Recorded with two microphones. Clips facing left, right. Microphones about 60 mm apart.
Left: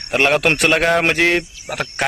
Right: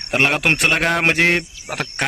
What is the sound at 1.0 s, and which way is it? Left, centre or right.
Speech, centre.